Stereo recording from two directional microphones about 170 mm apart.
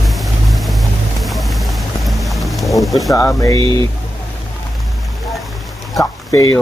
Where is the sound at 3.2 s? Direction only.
20° left (ahead or behind).